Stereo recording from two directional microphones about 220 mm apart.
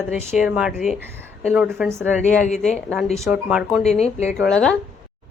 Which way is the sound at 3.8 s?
30° left (ahead or behind).